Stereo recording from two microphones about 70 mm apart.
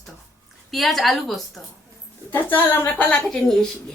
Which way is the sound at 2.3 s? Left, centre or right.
Left.